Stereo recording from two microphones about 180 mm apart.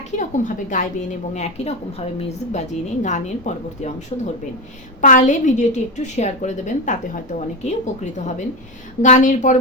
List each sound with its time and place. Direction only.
0.2 s a woman's voice: 45° left (ahead or behind)
4.9 s a woman's voice: 45° left (ahead or behind)
9.0 s a woman's voice: 45° left (ahead or behind)